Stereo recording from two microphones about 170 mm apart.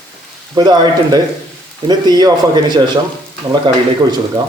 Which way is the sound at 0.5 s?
25° right (ahead or behind).